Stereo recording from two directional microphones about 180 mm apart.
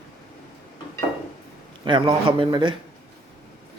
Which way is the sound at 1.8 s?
30° right (ahead or behind).